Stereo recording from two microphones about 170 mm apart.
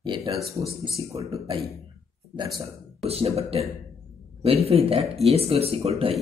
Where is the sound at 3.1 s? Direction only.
35° right (ahead or behind).